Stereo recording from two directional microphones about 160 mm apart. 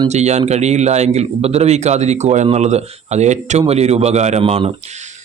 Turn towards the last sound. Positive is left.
turn(degrees=-40)  # may be behind; listen again after turning